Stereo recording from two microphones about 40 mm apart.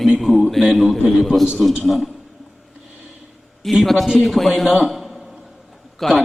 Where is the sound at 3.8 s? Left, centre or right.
Centre.